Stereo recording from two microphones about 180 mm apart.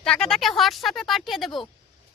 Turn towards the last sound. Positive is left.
turn(degrees=0)  # may be behind; listen again after turning